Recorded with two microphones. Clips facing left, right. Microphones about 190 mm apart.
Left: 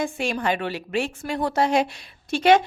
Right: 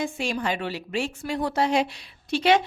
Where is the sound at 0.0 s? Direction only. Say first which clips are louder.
Left 2 dB; 55° left (ahead or behind).